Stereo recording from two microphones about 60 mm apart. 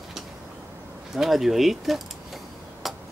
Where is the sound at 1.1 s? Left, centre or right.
Centre.